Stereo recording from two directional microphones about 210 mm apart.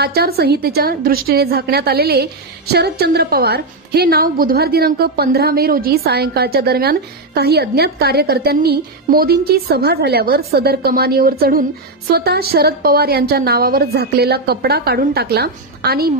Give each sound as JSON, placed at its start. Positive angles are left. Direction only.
{"t": 0.0, "sound": "a woman's voice", "side_deg": -50}